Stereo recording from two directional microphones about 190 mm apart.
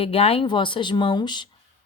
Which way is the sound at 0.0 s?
30° left (ahead or behind).